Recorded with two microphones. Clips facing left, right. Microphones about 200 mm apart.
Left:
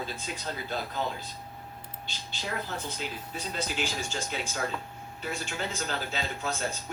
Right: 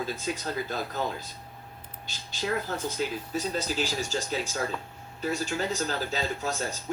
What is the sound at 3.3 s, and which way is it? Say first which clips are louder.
Speech: right 4 dB; 40° right (ahead or behind).